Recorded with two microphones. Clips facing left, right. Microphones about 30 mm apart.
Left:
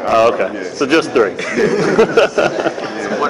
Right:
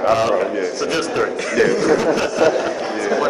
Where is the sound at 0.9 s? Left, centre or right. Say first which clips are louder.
Left 10 dB; left.